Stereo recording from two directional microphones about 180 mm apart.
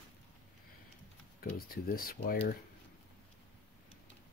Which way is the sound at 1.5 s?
55° left (ahead or behind).